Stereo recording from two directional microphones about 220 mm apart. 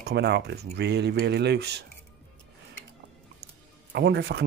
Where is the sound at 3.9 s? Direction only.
50° right (ahead or behind).